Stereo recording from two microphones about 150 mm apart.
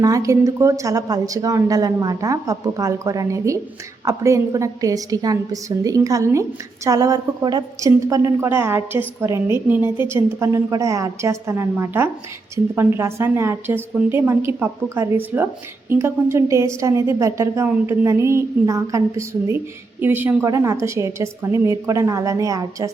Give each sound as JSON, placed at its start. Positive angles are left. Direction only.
{"t": 0.0, "sound": "a woman's voice", "side_deg": -20}